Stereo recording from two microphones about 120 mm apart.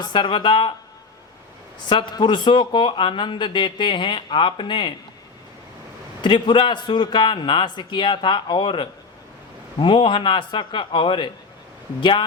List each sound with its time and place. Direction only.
0.0 s a man's voice: 40° left (ahead or behind)
1.9 s a man's voice: 40° left (ahead or behind)
6.2 s a man's voice: 40° left (ahead or behind)